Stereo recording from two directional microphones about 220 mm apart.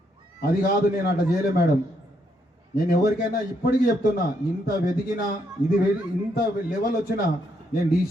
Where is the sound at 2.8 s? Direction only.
40° left (ahead or behind).